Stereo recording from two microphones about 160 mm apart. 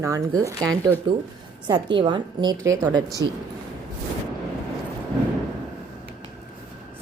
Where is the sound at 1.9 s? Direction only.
30° right (ahead or behind).